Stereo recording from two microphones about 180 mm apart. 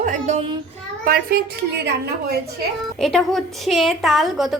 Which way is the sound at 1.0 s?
55° right (ahead or behind).